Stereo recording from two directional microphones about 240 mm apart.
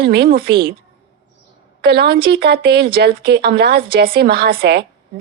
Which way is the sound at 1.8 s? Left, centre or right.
Right.